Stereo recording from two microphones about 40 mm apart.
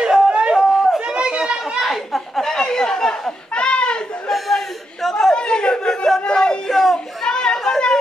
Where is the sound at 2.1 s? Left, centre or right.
Centre.